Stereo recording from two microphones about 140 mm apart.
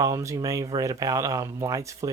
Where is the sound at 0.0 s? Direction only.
20° right (ahead or behind).